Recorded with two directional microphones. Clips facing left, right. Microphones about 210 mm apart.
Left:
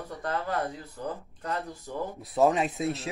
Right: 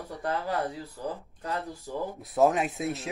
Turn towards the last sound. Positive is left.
turn(degrees=0)  # may be behind; listen again after turning